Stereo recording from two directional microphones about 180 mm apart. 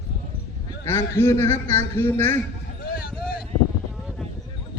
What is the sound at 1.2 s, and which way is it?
A man's voice, 15° left (ahead or behind).